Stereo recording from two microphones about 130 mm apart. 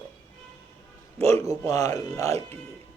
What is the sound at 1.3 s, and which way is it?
Speech, 25° left (ahead or behind).